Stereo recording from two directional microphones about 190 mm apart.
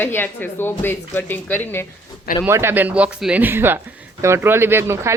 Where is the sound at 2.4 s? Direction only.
15° right (ahead or behind).